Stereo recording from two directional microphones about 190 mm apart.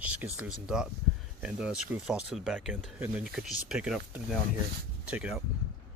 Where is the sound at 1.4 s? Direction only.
5° right (ahead or behind).